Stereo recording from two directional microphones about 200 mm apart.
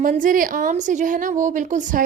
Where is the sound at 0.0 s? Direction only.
40° right (ahead or behind).